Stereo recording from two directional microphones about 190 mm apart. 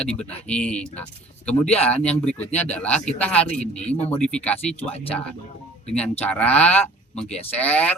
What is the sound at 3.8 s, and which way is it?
Speech, 35° left (ahead or behind).